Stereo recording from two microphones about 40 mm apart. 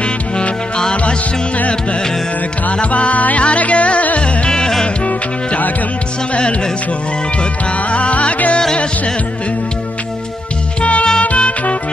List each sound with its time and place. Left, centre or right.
2.8 s music: left
4.5 s music: centre
5.0 s music: left
7.9 s music: left
10.8 s music: left